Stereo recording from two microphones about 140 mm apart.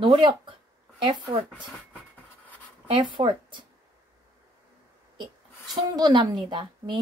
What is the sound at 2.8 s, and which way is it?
Speech, 35° right (ahead or behind).